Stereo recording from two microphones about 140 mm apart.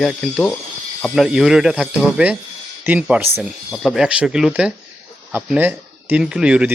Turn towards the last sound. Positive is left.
turn(degrees=-10)  # may be behind; listen again after turning